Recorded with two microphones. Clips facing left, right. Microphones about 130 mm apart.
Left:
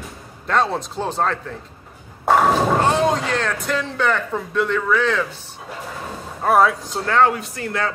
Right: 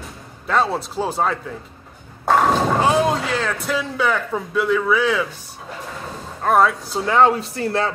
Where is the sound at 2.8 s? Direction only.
5° right (ahead or behind).